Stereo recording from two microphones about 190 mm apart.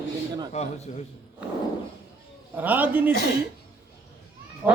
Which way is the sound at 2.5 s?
10° right (ahead or behind).